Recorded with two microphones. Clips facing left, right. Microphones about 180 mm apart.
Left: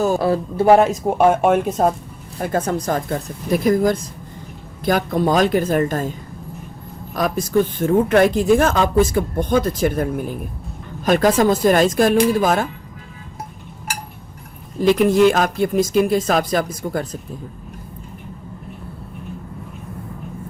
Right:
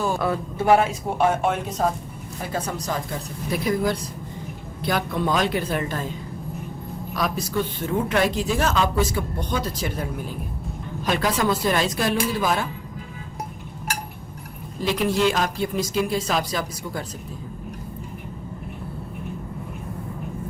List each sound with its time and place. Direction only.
0.0 s speech: 35° left (ahead or behind)
7.2 s speech: 50° left (ahead or behind)
14.8 s speech: 50° left (ahead or behind)